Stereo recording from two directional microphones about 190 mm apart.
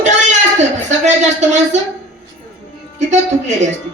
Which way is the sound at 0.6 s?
40° right (ahead or behind).